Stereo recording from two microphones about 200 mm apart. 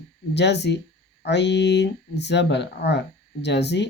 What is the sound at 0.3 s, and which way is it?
Speech, 60° left (ahead or behind).